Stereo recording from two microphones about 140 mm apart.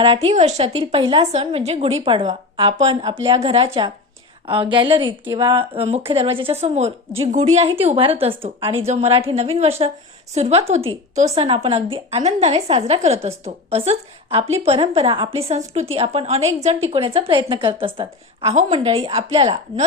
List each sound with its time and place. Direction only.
0.0 s a woman's voice: 45° right (ahead or behind); by 5.6 s 30° right (ahead or behind)
5.7 s a woman's voice: 45° right (ahead or behind)
11.4 s a woman's voice: 40° right (ahead or behind)